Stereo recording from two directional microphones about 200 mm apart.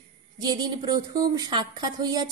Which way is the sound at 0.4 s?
20° right (ahead or behind).